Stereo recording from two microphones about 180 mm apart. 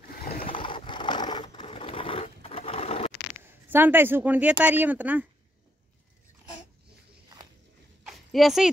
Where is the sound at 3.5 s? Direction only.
10° right (ahead or behind).